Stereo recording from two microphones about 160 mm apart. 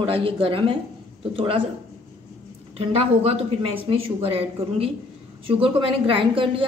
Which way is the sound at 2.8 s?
40° right (ahead or behind).